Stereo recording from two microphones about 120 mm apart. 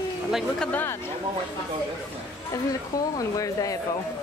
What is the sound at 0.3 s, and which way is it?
Speech, 5° right (ahead or behind).